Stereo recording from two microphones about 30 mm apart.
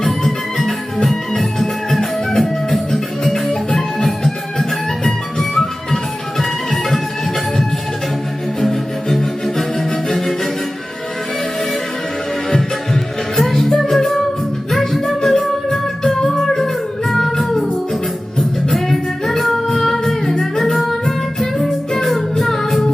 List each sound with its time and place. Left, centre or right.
0.0 s music: centre
8.6 s music: centre
12.5 s music: centre
17.1 s music: centre
18.3 s music: centre